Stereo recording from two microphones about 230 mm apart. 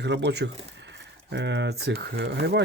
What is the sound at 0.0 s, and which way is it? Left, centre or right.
Speech, right.